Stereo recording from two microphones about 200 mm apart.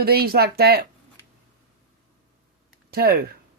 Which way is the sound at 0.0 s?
50° right (ahead or behind).